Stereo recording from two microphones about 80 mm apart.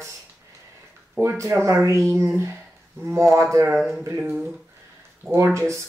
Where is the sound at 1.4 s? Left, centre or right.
Right.